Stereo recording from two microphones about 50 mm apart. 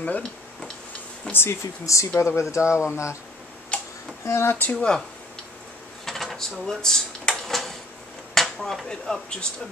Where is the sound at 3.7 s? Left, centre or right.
Left.